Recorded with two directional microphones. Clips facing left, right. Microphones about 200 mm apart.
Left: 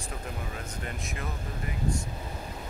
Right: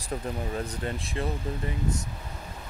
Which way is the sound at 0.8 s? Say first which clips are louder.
Right 5 dB; 30° right (ahead or behind).